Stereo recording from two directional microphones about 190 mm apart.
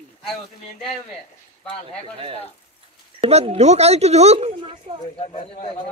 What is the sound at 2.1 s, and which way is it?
Speech, 30° right (ahead or behind).